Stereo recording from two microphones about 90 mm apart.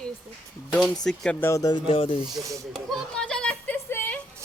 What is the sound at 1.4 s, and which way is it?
Speech, 30° left (ahead or behind).